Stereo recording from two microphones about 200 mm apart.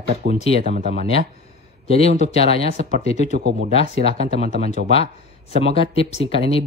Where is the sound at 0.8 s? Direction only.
30° left (ahead or behind).